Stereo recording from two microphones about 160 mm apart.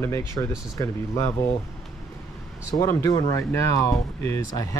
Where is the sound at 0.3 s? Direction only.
20° left (ahead or behind).